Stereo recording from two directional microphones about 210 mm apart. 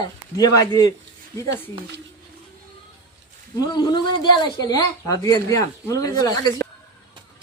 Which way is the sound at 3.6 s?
20° left (ahead or behind).